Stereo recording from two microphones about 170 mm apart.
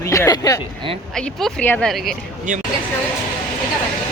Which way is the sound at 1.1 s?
5° left (ahead or behind).